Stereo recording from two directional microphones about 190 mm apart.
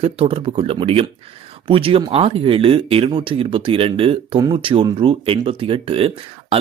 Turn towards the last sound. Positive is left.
turn(degrees=-30)  # may be behind; listen again after turning